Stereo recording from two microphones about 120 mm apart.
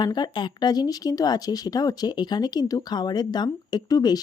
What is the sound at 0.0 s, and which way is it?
Speech, 35° left (ahead or behind).